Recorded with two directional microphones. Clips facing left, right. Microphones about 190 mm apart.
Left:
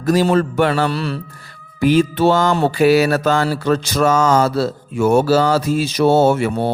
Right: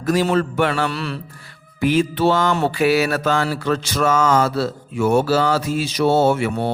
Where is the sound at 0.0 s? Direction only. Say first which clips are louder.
Left 3 dB; 35° left (ahead or behind).